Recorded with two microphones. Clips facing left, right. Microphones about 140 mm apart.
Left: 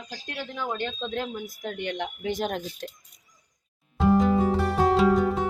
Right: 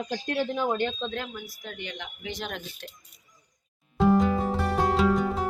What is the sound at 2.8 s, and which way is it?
Speech, 35° left (ahead or behind).